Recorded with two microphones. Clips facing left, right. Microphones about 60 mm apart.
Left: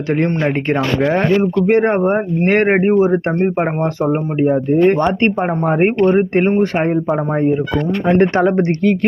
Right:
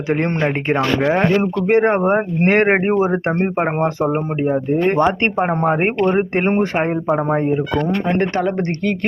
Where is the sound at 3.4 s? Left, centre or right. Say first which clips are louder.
Left 1 dB; centre.